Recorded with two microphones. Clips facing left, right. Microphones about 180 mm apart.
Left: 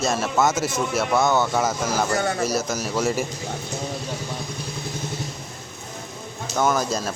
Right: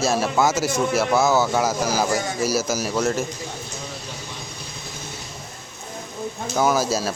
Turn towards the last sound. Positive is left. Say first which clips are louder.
# right 2 dB
turn(degrees=-5)  # may be behind; listen again after turning